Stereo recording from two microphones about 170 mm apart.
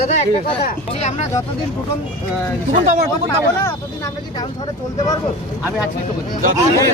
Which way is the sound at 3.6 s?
20° left (ahead or behind).